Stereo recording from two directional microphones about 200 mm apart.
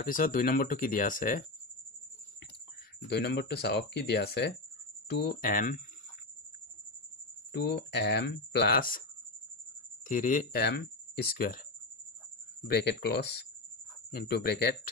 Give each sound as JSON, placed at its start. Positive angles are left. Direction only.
{"t": 0.0, "sound": "speech", "side_deg": 45}
{"t": 3.1, "sound": "speech", "side_deg": 55}
{"t": 7.5, "sound": "speech", "side_deg": 55}
{"t": 10.0, "sound": "speech", "side_deg": 40}
{"t": 12.6, "sound": "speech", "side_deg": 55}